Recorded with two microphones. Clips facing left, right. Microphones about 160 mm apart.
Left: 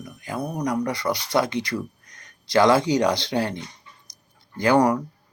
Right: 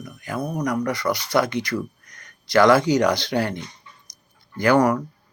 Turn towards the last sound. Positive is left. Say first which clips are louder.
# right 1 dB
turn(degrees=20)  # may be behind; listen again after turning